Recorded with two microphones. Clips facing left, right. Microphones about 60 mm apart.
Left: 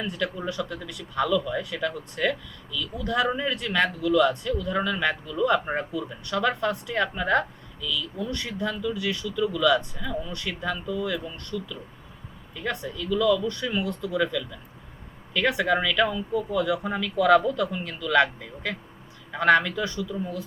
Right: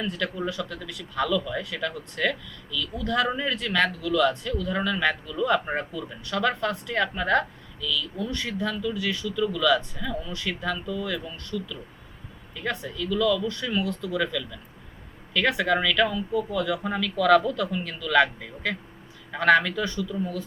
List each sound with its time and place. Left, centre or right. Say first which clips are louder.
0.0 s speech: even; centre
13.1 s speech: left 1 dB; centre